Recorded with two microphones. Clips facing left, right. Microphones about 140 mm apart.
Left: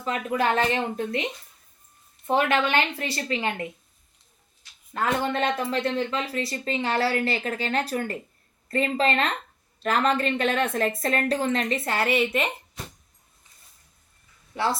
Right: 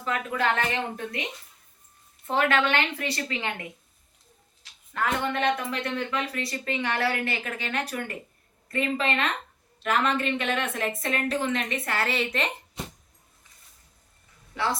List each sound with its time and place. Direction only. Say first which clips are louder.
0.0 s speech: left 2 dB; 25° left (ahead or behind)
2.2 s speech: left 1 dB; 25° left (ahead or behind)
4.9 s a woman's voice: left 2 dB; 25° left (ahead or behind)
11.9 s a woman's voice: left 4 dB; 15° left (ahead or behind)
14.5 s speech: left 2 dB; 25° left (ahead or behind)